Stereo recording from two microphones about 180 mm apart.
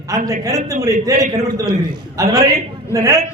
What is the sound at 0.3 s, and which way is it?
A man's voice, 20° right (ahead or behind).